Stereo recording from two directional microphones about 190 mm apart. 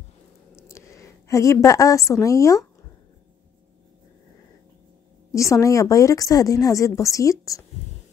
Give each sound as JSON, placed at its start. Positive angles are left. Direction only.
{"t": 0.7, "sound": "a woman's voice", "side_deg": 15}
{"t": 5.3, "sound": "a woman's voice", "side_deg": 15}